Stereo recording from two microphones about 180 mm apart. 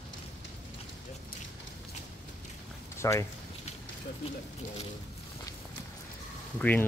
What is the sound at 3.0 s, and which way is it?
Speech, 15° left (ahead or behind).